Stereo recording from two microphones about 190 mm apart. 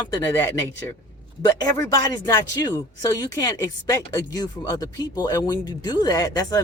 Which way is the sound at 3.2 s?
15° left (ahead or behind).